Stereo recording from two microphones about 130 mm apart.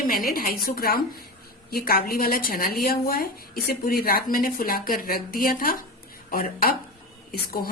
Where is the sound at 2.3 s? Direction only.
90° left.